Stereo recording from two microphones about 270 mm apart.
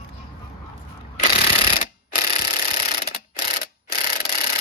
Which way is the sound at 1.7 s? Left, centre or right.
Left.